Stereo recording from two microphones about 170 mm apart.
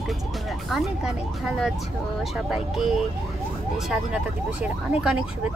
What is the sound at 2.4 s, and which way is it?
Speech, centre (ahead or behind).